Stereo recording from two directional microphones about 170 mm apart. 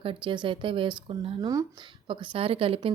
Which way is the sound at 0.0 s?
30° right (ahead or behind).